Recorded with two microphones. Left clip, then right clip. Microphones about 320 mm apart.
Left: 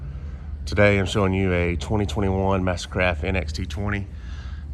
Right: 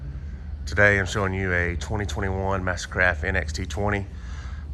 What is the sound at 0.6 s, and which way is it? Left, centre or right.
Speech, centre.